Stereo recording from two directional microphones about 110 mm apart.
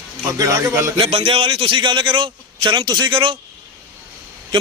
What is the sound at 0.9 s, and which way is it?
A man's voice, 60° right (ahead or behind).